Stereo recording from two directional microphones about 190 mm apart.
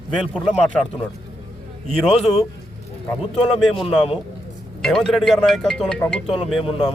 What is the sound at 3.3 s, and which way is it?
Speech, centre (ahead or behind).